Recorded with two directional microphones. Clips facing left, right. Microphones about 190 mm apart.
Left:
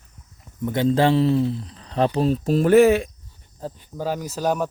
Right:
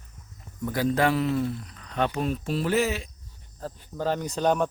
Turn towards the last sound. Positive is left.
turn(degrees=5)  # may be behind; listen again after turning